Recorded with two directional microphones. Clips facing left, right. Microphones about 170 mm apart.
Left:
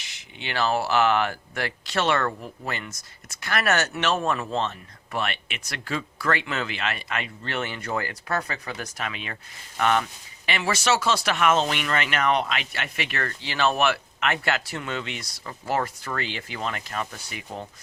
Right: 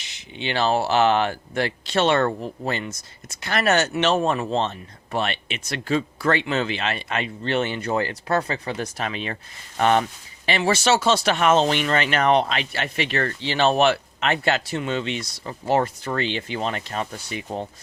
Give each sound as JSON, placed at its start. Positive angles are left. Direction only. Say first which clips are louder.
{"t": 0.0, "sound": "speech", "louder": "right 7 dB", "side_deg": -20}